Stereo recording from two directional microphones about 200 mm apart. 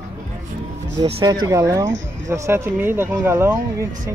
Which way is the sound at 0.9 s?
25° right (ahead or behind).